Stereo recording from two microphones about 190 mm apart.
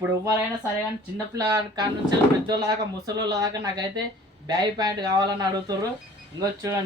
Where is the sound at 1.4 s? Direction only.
20° right (ahead or behind).